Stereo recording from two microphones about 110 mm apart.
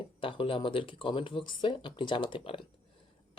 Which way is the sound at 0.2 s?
55° left (ahead or behind).